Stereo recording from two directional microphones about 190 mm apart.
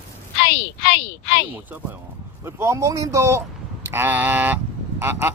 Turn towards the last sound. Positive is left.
turn(degrees=-10)  # may be behind; listen again after turning